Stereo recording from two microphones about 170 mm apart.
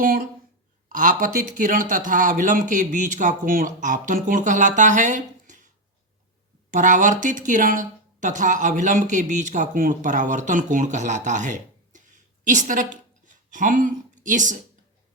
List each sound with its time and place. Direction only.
0.0 s a woman's voice: 55° right (ahead or behind)